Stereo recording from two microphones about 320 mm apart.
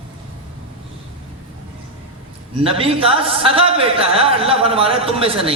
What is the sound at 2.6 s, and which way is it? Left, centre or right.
A man's voice, centre.